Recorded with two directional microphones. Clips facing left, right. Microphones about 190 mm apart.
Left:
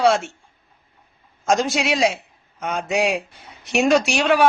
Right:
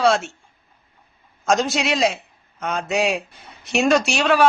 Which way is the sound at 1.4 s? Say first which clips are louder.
Even; 10° left (ahead or behind).